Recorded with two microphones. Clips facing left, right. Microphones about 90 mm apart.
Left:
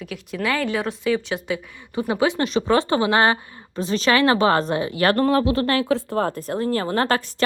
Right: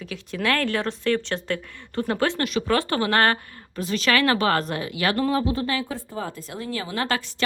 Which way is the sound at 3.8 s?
30° left (ahead or behind).